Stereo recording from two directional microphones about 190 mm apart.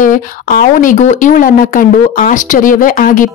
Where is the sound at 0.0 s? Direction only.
45° left (ahead or behind).